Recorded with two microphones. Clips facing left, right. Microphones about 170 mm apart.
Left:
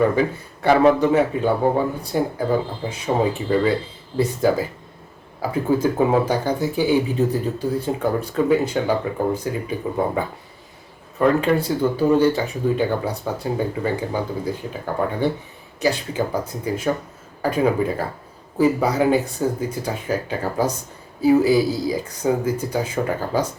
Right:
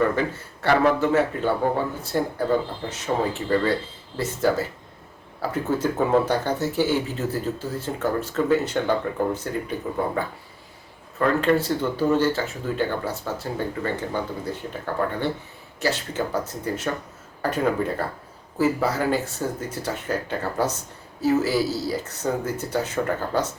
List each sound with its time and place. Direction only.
0.2 s speech: 15° left (ahead or behind)
11.2 s speech: 15° left (ahead or behind)